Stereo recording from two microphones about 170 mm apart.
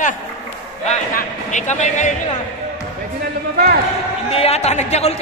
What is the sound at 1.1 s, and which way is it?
Speech, 45° left (ahead or behind).